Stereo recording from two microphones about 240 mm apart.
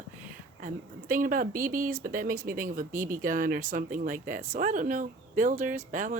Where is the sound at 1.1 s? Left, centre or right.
Right.